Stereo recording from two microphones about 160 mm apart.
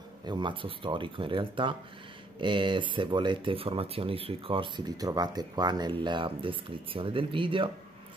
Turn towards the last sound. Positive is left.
turn(degrees=-35)  # may be behind; listen again after turning